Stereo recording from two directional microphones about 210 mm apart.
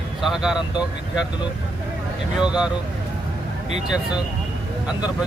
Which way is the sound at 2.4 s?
5° right (ahead or behind).